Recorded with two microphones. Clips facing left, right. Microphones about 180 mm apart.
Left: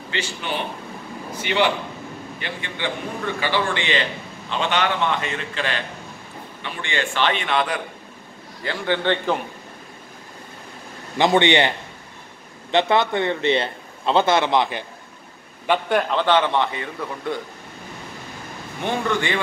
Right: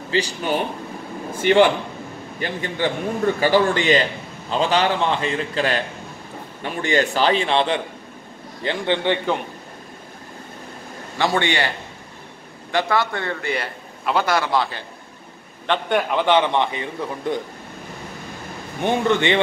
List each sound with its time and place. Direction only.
0.1 s a man's voice: 40° right (ahead or behind); by 9.2 s 15° right (ahead or behind)
11.1 s a man's voice: 20° left (ahead or behind)
12.7 s a man's voice: 20° left (ahead or behind)
15.6 s a man's voice: 10° left (ahead or behind)
16.0 s a man's voice: 10° right (ahead or behind)
18.8 s a man's voice: 20° right (ahead or behind)